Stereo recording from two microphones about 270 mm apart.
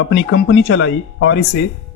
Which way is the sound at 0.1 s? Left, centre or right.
Left.